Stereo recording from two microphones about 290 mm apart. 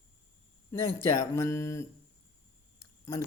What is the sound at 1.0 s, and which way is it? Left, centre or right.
Speech, centre.